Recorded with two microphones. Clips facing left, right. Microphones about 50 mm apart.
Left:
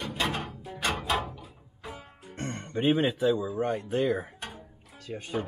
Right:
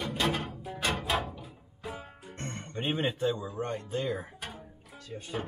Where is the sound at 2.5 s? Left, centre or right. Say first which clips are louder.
Left 7 dB; centre.